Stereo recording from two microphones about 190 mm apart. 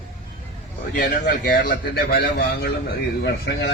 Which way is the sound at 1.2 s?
50° left (ahead or behind).